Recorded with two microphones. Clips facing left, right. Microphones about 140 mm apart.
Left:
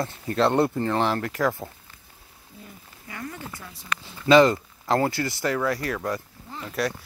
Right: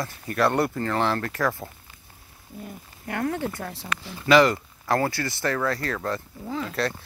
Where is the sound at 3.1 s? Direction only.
65° right (ahead or behind).